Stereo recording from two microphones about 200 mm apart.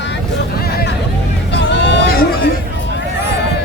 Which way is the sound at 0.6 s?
50° left (ahead or behind).